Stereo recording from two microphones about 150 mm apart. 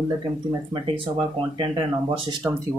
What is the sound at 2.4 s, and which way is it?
Speech, 15° right (ahead or behind).